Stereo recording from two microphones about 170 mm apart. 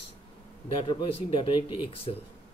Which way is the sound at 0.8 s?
30° left (ahead or behind).